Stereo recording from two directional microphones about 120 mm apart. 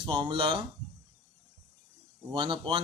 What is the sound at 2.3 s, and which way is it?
Speech, 40° right (ahead or behind).